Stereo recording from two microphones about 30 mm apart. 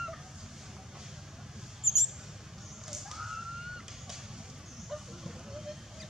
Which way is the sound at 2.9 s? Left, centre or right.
Centre.